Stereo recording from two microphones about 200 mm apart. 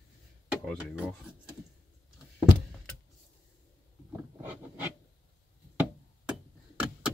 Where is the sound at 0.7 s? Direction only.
5° right (ahead or behind).